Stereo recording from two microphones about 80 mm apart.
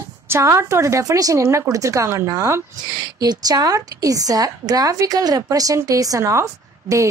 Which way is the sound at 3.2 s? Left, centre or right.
Right.